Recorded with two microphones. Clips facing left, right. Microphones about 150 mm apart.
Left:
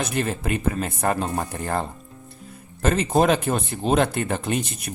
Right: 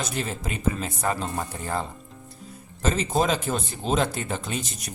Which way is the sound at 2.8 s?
60° left (ahead or behind).